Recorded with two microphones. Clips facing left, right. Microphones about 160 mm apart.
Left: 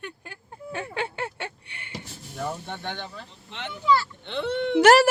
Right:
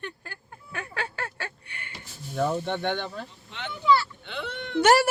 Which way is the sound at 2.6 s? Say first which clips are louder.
Right 6 dB; 60° right (ahead or behind).